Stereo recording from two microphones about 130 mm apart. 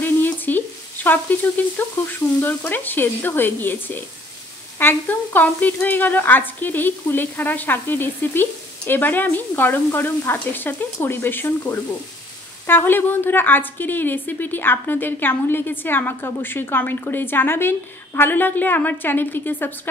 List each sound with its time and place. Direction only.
0.0 s frying: 15° left (ahead or behind)
4.7 s a woman's voice: 15° left (ahead or behind)